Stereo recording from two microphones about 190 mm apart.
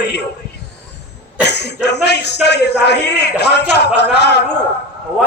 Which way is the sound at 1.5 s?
65° left (ahead or behind).